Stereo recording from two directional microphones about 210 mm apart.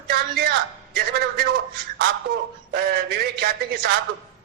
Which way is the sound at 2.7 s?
50° right (ahead or behind).